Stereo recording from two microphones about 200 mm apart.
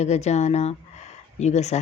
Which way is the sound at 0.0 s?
35° left (ahead or behind).